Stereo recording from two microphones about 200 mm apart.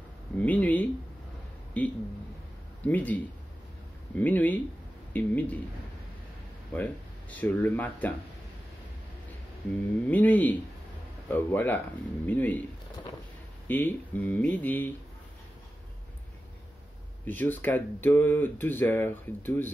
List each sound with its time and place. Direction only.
0.4 s speech: 10° left (ahead or behind)
4.2 s speech: 10° left (ahead or behind)
6.7 s speech: 5° left (ahead or behind)
10.0 s speech: 10° left (ahead or behind)
13.7 s speech: 10° left (ahead or behind)
17.3 s speech: 10° left (ahead or behind)